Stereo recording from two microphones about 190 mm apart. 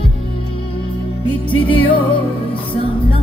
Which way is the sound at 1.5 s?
30° left (ahead or behind).